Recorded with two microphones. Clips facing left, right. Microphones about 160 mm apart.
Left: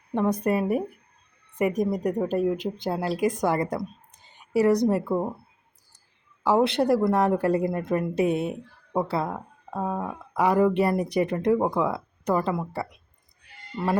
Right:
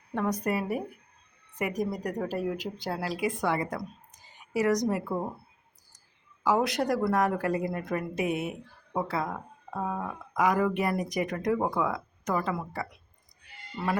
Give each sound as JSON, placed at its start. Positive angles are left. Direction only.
{"t": 0.4, "sound": "speech", "side_deg": 25}
{"t": 1.8, "sound": "speech", "side_deg": 20}
{"t": 3.2, "sound": "speech", "side_deg": 40}
{"t": 3.8, "sound": "a woman's voice", "side_deg": 30}
{"t": 6.4, "sound": "speech", "side_deg": 30}
{"t": 9.7, "sound": "speech", "side_deg": 20}
{"t": 10.3, "sound": "speech", "side_deg": 30}